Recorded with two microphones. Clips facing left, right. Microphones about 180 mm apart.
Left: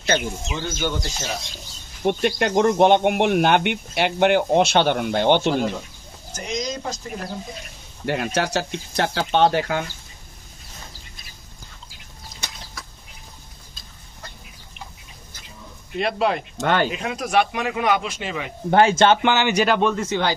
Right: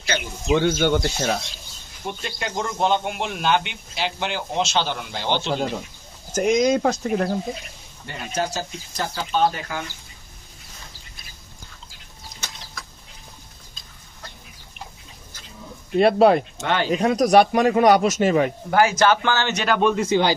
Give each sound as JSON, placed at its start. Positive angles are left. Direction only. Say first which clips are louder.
{"t": 0.6, "sound": "speech", "louder": "right 7 dB", "side_deg": -60}
{"t": 2.0, "sound": "speech", "louder": "left 10 dB", "side_deg": 65}
{"t": 6.3, "sound": "speech", "louder": "right 10 dB", "side_deg": -55}
{"t": 8.0, "sound": "speech", "louder": "left 4 dB", "side_deg": 70}
{"t": 16.0, "sound": "speech", "louder": "right 7 dB", "side_deg": -40}
{"t": 16.6, "sound": "speech", "louder": "left 7 dB", "side_deg": 50}
{"t": 16.9, "sound": "speech", "louder": "right 6 dB", "side_deg": -40}
{"t": 18.7, "sound": "a man's voice", "louder": "left 4 dB", "side_deg": 25}
{"t": 19.8, "sound": "speech", "louder": "right 2 dB", "side_deg": -10}